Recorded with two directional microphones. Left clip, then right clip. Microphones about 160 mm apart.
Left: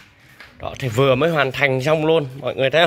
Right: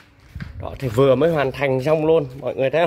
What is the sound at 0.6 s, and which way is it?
Speech, 15° right (ahead or behind).